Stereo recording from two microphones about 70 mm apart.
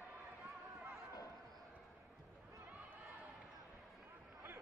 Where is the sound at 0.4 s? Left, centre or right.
Centre.